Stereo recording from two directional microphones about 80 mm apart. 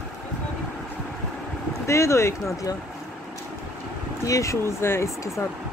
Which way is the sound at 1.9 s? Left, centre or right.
Left.